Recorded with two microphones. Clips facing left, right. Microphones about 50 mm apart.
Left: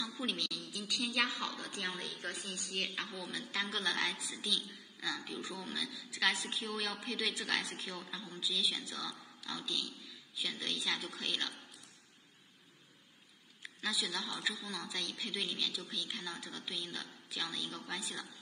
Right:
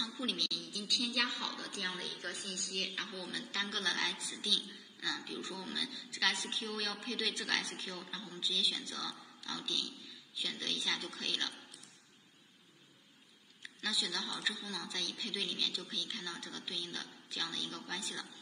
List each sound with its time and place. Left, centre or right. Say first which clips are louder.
0.2 s a woman's voice: even; centre
13.6 s a man's voice: even; centre